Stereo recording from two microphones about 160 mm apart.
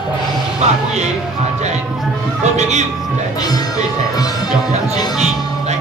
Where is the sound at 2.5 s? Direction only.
45° right (ahead or behind).